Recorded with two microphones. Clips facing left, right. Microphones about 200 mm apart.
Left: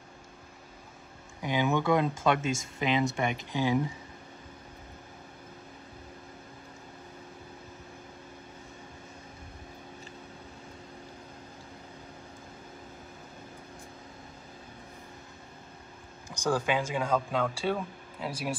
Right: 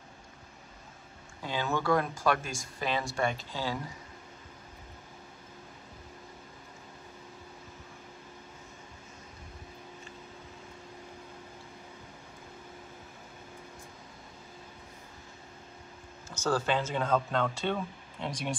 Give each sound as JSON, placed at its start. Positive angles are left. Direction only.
{"t": 1.4, "sound": "speech", "side_deg": 15}
{"t": 16.3, "sound": "speech", "side_deg": 15}